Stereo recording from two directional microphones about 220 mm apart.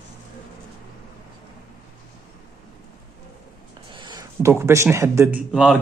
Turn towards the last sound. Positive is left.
turn(degrees=0)  # may be behind; listen again after turning